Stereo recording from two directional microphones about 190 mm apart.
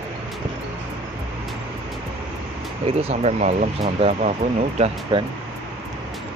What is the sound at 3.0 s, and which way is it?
Speech, 35° right (ahead or behind).